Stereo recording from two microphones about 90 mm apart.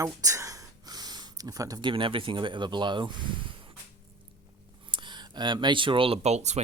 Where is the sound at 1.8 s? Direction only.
65° right (ahead or behind).